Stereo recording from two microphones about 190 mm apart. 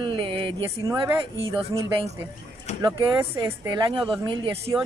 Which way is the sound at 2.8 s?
25° right (ahead or behind).